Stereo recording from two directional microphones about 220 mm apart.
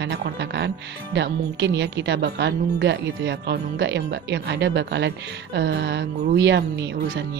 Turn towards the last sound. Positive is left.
turn(degrees=-50)  # may be behind; listen again after turning